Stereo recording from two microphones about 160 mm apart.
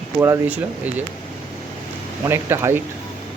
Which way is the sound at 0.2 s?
15° right (ahead or behind).